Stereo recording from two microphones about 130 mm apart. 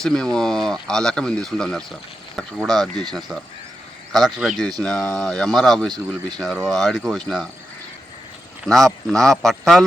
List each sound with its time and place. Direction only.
0.0 s speech: 5° left (ahead or behind)
2.9 s speech: 35° right (ahead or behind)
3.2 s speech: centre (ahead or behind)
8.6 s speech: centre (ahead or behind)